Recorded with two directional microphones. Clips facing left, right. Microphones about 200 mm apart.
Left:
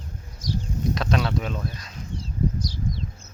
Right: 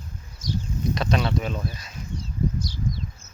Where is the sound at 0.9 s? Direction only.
Centre (ahead or behind).